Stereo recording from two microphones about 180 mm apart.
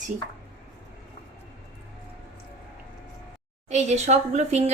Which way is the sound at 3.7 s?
40° right (ahead or behind).